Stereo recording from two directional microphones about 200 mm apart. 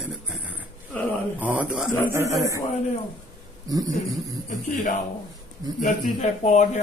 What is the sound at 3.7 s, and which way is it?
Speech, 20° right (ahead or behind).